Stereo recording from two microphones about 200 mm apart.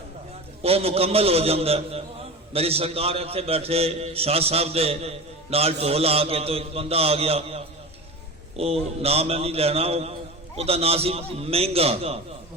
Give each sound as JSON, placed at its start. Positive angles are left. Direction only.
{"t": 0.6, "sound": "a man's voice", "side_deg": -30}